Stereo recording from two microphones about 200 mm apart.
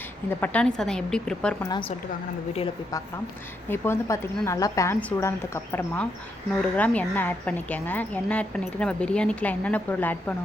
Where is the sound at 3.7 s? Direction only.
10° left (ahead or behind).